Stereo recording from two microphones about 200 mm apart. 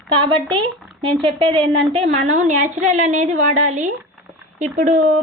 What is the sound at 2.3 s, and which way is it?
A woman's voice, 40° right (ahead or behind).